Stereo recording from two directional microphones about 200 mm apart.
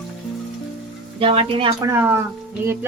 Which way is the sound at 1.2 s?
30° right (ahead or behind).